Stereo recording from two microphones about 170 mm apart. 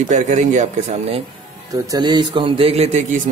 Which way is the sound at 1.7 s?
20° right (ahead or behind).